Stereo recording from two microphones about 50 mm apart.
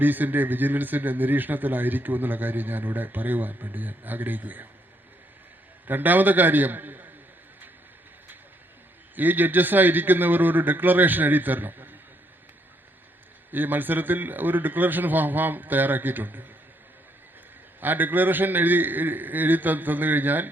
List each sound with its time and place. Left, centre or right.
0.0 s a man's voice: right
5.9 s a man's voice: right
9.1 s a man's voice: right
13.5 s a man's voice: right
17.7 s a man's voice: right